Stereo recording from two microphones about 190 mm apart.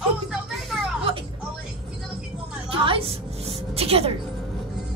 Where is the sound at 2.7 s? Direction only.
30° right (ahead or behind).